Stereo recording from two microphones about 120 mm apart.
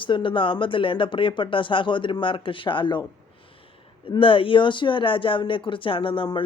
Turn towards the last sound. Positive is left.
turn(degrees=45)  # may be behind; listen again after turning